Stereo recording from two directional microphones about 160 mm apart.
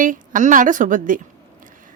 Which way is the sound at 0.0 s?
55° right (ahead or behind).